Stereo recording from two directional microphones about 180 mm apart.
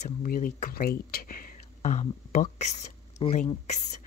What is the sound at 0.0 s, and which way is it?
Speech, 50° left (ahead or behind).